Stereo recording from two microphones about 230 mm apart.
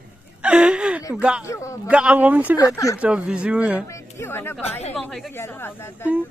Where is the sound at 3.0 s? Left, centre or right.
Centre.